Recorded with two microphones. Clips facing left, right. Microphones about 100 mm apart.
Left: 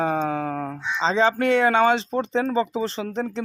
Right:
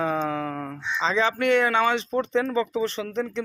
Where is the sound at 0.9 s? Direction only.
30° left (ahead or behind).